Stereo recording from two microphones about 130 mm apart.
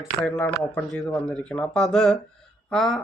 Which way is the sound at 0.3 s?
5° left (ahead or behind).